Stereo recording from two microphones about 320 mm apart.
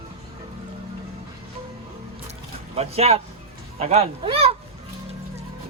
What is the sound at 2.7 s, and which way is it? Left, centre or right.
Speech, centre.